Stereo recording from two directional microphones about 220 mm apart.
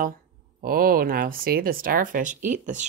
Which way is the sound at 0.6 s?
40° right (ahead or behind).